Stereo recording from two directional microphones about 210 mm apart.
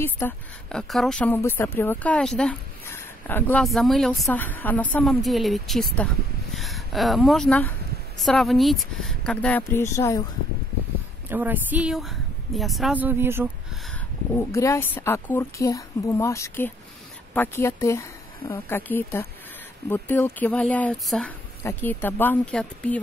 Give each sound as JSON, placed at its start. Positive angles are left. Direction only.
{"t": 0.0, "sound": "a woman's voice", "side_deg": 5}
{"t": 11.2, "sound": "speech", "side_deg": -10}
{"t": 14.3, "sound": "speech", "side_deg": 15}